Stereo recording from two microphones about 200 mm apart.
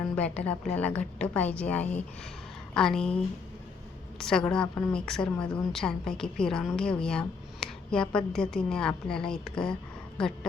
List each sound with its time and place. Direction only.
0.2 s a woman's voice: 5° left (ahead or behind)
4.2 s a woman's voice: 5° left (ahead or behind)